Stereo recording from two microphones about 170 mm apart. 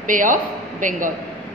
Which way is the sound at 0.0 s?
50° right (ahead or behind).